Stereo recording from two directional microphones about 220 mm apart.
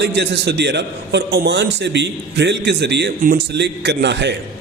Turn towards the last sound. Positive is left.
turn(degrees=-50)  # may be behind; listen again after turning